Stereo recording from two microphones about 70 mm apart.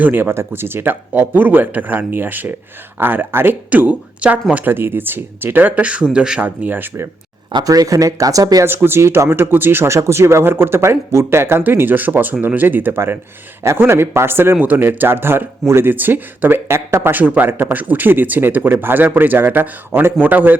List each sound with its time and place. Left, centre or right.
0.0 s speech: right; by 6.4 s centre
6.4 s speech: right
7.6 s speech: right
8.6 s speech: right
19.9 s speech: right
20.2 s speech: right